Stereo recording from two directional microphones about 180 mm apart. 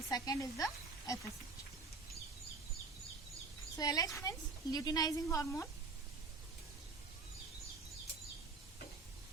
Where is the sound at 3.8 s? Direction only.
20° left (ahead or behind).